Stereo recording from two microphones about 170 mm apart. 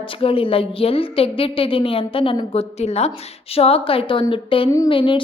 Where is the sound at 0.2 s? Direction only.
35° left (ahead or behind).